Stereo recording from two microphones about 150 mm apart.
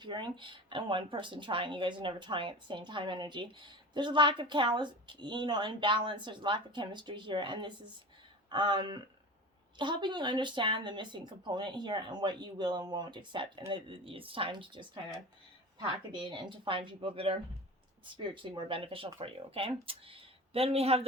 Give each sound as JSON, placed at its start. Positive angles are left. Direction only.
{"t": 0.0, "sound": "speech", "side_deg": -30}